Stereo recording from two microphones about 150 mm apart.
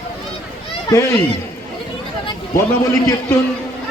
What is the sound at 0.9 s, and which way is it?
Speech, 20° left (ahead or behind).